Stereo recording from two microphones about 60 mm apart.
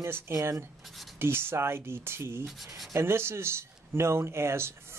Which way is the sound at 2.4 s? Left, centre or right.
Centre.